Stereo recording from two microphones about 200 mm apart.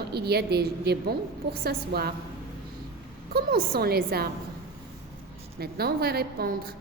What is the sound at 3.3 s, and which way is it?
A woman's voice, 50° right (ahead or behind).